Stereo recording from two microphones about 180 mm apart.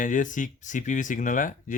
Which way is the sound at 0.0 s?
45° left (ahead or behind).